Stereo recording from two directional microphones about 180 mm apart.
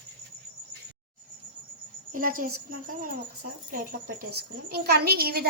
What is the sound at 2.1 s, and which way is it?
A woman's voice, 50° right (ahead or behind).